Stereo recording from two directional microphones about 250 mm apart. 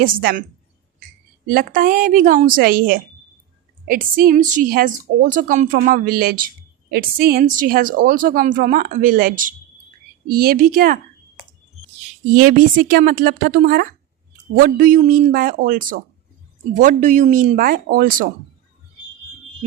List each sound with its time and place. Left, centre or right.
0.0 s a woman's voice: right
1.5 s a woman's voice: right
12.4 s a woman's voice: right